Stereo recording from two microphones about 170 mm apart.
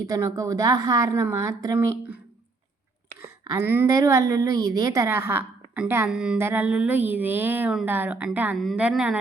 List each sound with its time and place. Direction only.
0.0 s a woman's voice: 20° right (ahead or behind)
3.2 s a sound: 20° right (ahead or behind)
3.7 s a woman's voice: 15° right (ahead or behind)